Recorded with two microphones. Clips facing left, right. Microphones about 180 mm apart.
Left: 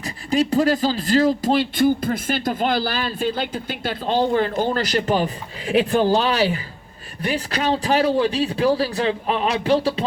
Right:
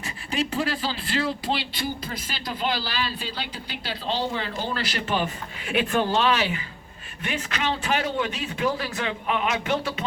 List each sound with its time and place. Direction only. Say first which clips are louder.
0.0 s speech: left 7 dB; 35° left (ahead or behind)